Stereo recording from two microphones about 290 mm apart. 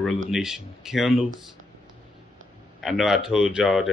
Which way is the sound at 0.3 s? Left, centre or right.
Centre.